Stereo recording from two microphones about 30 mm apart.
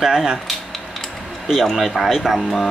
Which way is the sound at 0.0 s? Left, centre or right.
Centre.